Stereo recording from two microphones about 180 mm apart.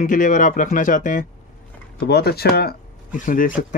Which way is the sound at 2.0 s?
60° left (ahead or behind).